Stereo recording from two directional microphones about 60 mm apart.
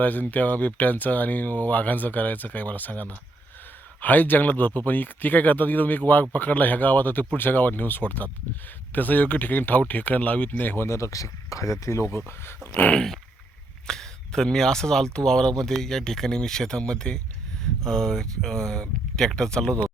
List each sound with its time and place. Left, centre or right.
0.0 s speech: left
10.8 s speech: left
13.8 s speech: centre